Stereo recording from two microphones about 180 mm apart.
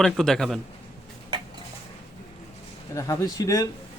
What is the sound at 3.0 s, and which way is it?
Speech, 20° left (ahead or behind).